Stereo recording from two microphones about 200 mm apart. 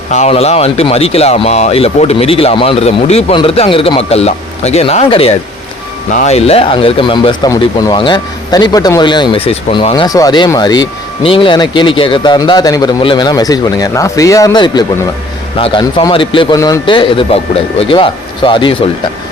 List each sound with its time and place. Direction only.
0.1 s speech: 35° left (ahead or behind)